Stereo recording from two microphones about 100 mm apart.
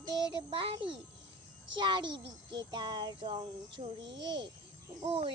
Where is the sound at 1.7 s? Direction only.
50° right (ahead or behind).